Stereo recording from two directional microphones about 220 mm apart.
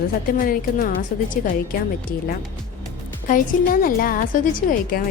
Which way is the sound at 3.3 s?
40° left (ahead or behind).